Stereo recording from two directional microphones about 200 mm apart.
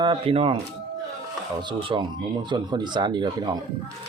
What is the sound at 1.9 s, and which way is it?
Speech, 25° right (ahead or behind).